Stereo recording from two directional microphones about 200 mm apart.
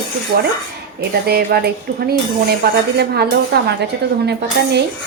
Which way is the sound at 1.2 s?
50° right (ahead or behind).